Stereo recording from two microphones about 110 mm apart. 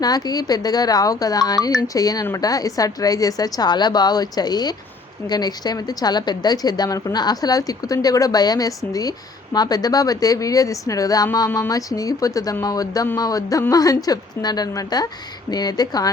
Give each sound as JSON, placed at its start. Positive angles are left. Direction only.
{"t": 0.0, "sound": "a woman's voice", "side_deg": 35}